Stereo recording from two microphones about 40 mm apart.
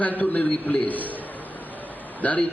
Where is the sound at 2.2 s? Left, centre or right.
Left.